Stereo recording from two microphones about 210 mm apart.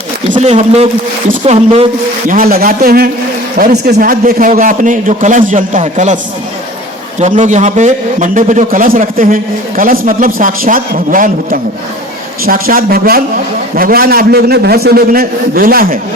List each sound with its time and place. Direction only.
0.3 s a man's voice: 35° right (ahead or behind)
2.3 s a man's voice: 45° right (ahead or behind)
7.2 s a man's voice: 35° right (ahead or behind)